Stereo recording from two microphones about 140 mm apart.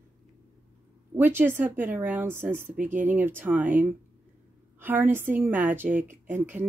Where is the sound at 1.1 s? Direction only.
15° right (ahead or behind).